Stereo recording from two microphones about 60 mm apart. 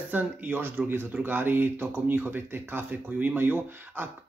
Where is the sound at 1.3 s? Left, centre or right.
Right.